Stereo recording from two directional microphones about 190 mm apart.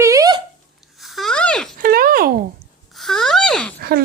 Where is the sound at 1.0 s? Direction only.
Centre (ahead or behind).